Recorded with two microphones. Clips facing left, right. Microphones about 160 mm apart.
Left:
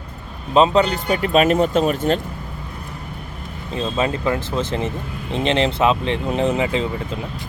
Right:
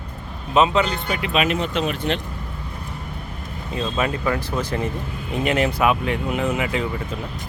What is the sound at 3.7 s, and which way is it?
Speech, 25° left (ahead or behind).